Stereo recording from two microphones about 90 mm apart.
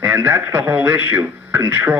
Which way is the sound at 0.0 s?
20° right (ahead or behind).